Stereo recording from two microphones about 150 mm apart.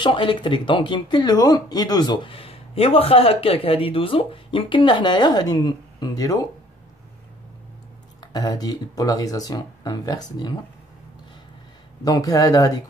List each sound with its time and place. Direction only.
0.0 s speech: 35° left (ahead or behind)
8.2 s speech: 25° left (ahead or behind)
12.0 s speech: 25° left (ahead or behind)